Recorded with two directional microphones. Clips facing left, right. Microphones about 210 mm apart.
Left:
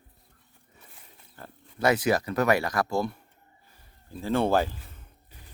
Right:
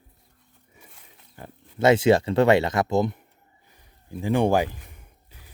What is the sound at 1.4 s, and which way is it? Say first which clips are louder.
Speech: right 5 dB; 20° right (ahead or behind).